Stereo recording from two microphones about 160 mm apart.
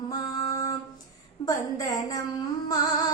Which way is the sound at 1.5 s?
25° left (ahead or behind).